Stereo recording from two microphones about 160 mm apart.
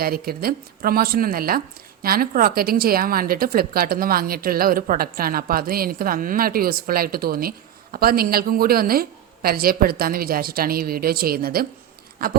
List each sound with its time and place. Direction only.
0.0 s speech: 70° right (ahead or behind)